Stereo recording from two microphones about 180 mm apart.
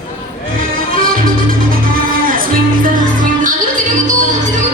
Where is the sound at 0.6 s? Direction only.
50° right (ahead or behind).